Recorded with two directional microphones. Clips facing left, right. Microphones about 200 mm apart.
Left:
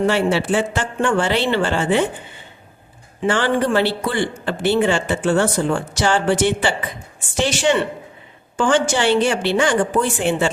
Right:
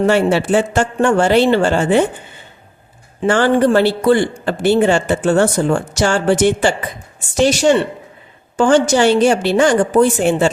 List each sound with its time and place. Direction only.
0.1 s speech: 45° right (ahead or behind)
3.2 s a woman's voice: 45° right (ahead or behind)